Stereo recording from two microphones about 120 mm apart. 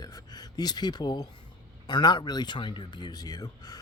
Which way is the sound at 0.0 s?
35° left (ahead or behind).